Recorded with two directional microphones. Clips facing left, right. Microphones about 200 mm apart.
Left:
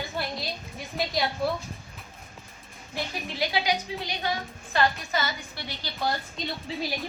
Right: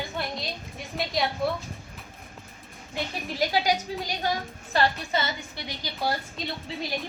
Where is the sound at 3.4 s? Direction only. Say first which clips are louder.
Right 2 dB; 45° right (ahead or behind); by 6.7 s 5° right (ahead or behind).